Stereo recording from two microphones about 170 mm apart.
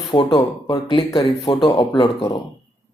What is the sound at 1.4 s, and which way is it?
Speech, 35° left (ahead or behind).